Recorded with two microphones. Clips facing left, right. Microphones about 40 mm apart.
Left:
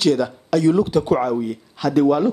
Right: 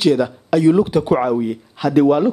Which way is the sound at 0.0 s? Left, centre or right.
Centre.